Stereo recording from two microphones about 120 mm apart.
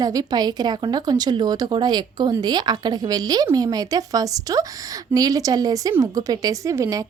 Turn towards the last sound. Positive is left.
turn(degrees=-25)  # may be behind; listen again after turning